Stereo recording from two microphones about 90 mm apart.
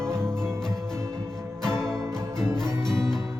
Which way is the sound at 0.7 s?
30° right (ahead or behind).